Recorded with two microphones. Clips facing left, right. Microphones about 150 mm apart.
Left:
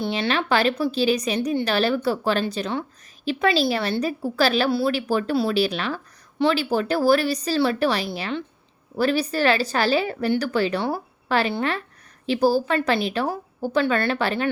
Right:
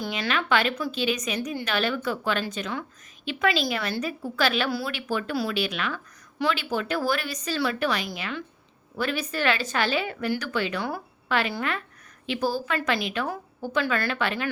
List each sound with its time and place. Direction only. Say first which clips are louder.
0.0 s a woman's voice: left 5 dB; 30° left (ahead or behind)